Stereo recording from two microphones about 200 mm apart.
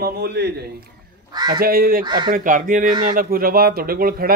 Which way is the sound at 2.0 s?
20° right (ahead or behind).